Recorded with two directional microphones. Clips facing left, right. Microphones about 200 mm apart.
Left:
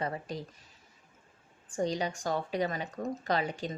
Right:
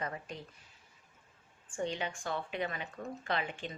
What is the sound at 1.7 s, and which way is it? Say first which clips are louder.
Speech: left 5 dB; 40° left (ahead or behind).